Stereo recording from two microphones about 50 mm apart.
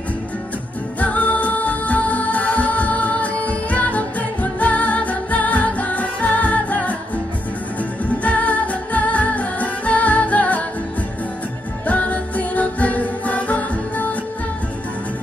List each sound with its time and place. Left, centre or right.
1.0 s music: left
8.2 s music: left
11.8 s music: left